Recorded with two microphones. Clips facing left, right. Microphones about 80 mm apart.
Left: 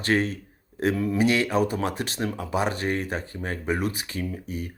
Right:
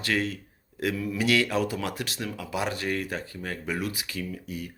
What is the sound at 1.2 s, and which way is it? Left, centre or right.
Speech, left.